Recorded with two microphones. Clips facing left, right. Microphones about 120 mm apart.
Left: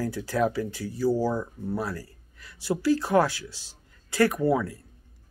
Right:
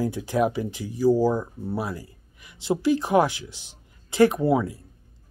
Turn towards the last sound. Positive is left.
turn(degrees=-20)  # may be behind; listen again after turning